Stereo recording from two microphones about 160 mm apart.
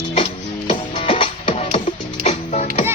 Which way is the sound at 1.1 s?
30° left (ahead or behind).